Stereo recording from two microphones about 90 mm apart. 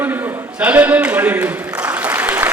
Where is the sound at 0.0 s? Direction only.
20° right (ahead or behind).